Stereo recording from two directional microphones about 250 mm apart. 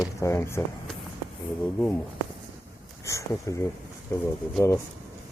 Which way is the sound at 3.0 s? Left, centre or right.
Centre.